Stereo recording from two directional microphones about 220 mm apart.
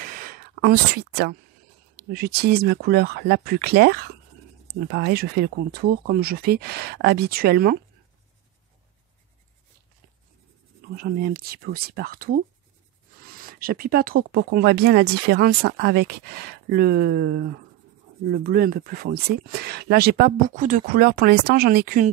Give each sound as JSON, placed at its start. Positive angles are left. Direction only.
{"t": 0.0, "sound": "a sound", "side_deg": -40}
{"t": 2.1, "sound": "speech", "side_deg": -45}
{"t": 11.0, "sound": "speech", "side_deg": -45}